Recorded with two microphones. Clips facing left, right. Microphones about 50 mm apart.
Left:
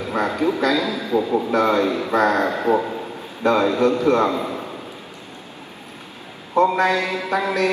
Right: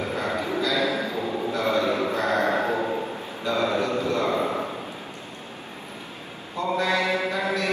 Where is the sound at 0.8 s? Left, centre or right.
Right.